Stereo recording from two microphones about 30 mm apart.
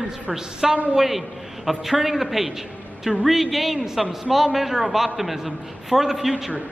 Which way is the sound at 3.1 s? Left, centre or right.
Right.